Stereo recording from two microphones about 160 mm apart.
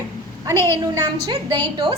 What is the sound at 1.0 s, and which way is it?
Speech, 30° right (ahead or behind).